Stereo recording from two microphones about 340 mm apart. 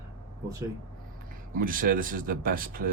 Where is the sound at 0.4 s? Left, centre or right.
Centre.